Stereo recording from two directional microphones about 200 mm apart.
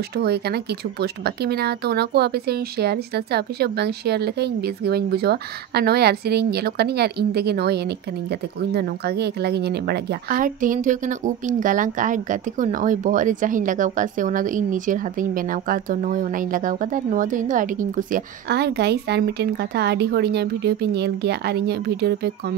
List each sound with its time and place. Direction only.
0.1 s a woman's voice: 55° right (ahead or behind)